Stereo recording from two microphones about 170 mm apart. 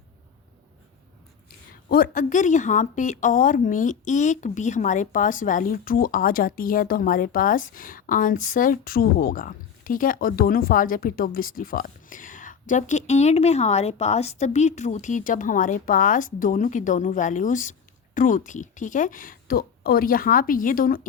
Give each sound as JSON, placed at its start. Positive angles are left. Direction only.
{"t": 1.7, "sound": "a woman's voice", "side_deg": 60}